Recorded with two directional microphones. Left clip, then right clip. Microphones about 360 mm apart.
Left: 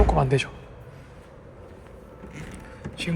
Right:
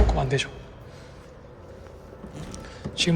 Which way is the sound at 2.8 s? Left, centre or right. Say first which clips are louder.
Right 7 dB; centre.